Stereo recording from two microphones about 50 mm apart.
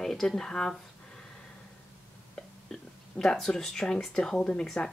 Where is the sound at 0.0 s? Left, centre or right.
Centre.